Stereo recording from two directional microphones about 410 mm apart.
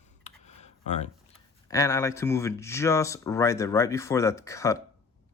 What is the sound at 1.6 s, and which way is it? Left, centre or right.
Speech, centre.